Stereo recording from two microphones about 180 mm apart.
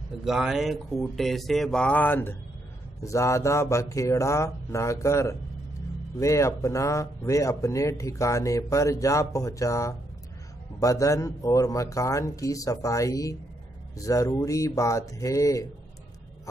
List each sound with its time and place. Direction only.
0.2 s speech: centre (ahead or behind); by 15.7 s 20° left (ahead or behind)